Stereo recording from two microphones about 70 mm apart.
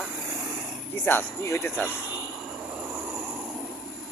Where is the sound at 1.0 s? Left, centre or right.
Left.